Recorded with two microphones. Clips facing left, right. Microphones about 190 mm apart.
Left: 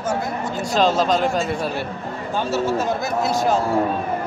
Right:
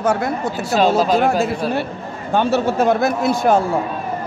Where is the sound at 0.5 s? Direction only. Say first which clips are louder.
Right 1 dB; 5° right (ahead or behind).